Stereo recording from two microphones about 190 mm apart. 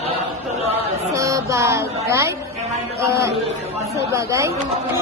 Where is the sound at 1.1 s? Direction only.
15° right (ahead or behind).